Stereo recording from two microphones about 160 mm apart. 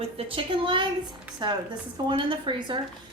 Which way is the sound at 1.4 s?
30° right (ahead or behind).